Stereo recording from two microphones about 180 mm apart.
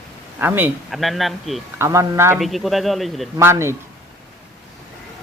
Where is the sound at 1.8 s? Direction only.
15° right (ahead or behind).